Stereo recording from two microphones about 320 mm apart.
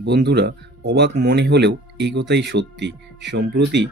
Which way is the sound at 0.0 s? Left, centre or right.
Right.